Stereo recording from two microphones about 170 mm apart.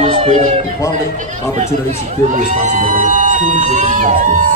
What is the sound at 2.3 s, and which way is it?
Speech, 50° right (ahead or behind).